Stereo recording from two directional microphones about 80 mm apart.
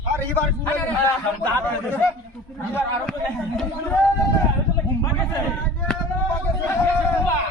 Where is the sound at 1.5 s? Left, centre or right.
Left.